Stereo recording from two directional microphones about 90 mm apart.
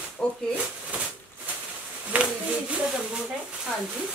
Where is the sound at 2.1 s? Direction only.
15° right (ahead or behind).